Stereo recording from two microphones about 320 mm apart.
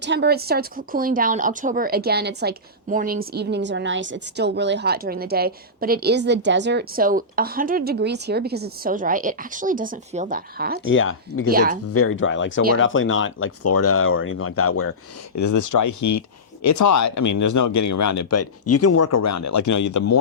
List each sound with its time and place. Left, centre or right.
0.0 s a woman's voice: right
10.8 s speech: left
11.4 s a woman's voice: right
11.9 s speech: left
15.4 s speech: left